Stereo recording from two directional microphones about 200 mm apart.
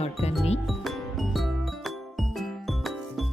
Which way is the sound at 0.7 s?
Centre (ahead or behind).